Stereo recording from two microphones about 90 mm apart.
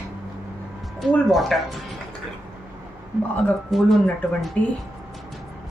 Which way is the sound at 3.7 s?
Centre (ahead or behind).